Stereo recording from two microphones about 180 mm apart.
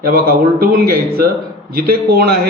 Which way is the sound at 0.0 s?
55° right (ahead or behind).